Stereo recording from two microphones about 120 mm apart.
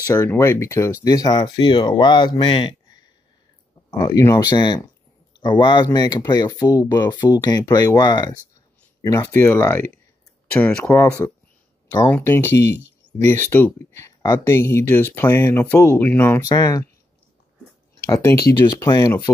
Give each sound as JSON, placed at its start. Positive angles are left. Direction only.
{"t": 0.0, "sound": "speech", "side_deg": 30}
{"t": 4.0, "sound": "speech", "side_deg": 30}
{"t": 10.6, "sound": "speech", "side_deg": 5}
{"t": 12.2, "sound": "speech", "side_deg": 20}
{"t": 16.3, "sound": "speech", "side_deg": 30}
{"t": 18.0, "sound": "speech", "side_deg": 25}